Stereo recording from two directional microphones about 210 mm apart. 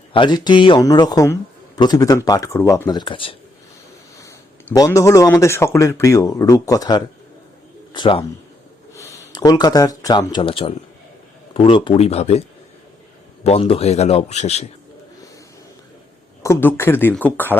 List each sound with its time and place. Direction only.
0.1 s a man's voice: 20° left (ahead or behind)
13.4 s a man's voice: 30° left (ahead or behind)
16.4 s speech: 10° left (ahead or behind)